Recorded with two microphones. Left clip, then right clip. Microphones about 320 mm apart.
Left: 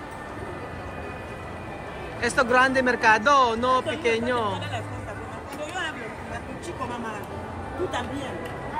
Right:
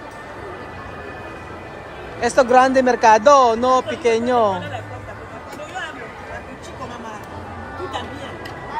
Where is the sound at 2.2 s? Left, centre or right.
Centre.